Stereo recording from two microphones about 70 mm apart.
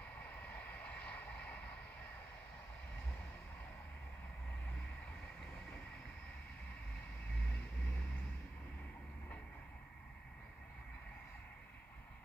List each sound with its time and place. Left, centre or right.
0.0 s vehicle: left